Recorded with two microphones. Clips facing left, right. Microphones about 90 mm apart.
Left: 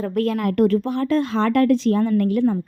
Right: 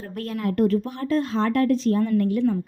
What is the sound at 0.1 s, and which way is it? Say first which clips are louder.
A woman's voice: left 3 dB; 90° left.